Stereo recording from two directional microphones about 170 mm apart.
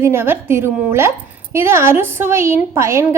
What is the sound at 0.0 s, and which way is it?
A woman's voice, 15° right (ahead or behind).